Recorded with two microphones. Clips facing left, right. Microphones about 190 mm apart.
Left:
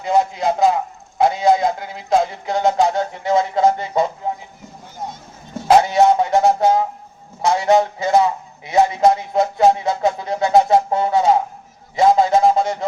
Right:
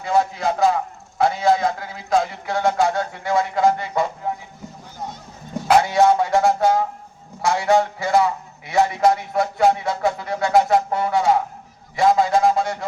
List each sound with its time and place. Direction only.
0.0 s a man's voice: 20° left (ahead or behind)
4.2 s vehicle: 20° left (ahead or behind)
5.6 s music: 20° left (ahead or behind)
7.4 s a man's voice: 20° left (ahead or behind)
11.9 s a sound: 20° left (ahead or behind)